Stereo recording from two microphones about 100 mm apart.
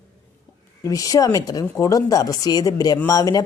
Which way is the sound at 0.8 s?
35° left (ahead or behind).